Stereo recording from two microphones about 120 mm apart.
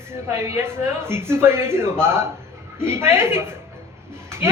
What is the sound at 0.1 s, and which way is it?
Speech, 20° right (ahead or behind).